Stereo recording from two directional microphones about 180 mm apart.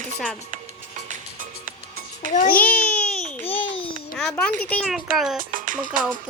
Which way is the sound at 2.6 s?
10° left (ahead or behind).